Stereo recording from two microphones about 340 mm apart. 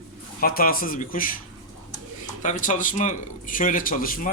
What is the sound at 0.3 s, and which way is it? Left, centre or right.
A man's voice, left.